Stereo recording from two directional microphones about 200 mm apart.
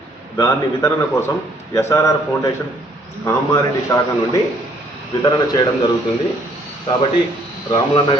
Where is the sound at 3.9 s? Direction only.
15° left (ahead or behind).